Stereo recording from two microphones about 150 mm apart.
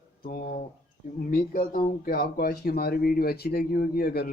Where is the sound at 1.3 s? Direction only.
80° left.